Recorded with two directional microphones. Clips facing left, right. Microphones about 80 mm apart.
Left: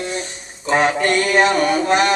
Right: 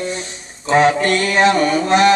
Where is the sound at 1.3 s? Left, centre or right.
Centre.